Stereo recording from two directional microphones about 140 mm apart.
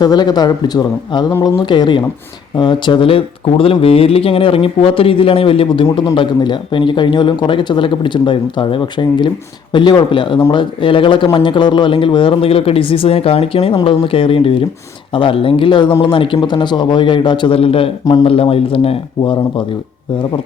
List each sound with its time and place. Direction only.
0.0 s speech: 30° left (ahead or behind)